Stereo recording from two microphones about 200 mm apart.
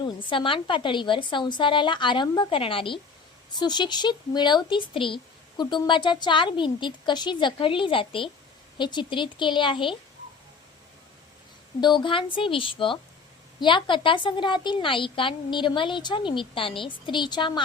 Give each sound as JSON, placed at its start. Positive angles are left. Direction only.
{"t": 0.0, "sound": "speech", "side_deg": 25}
{"t": 11.8, "sound": "speech", "side_deg": 20}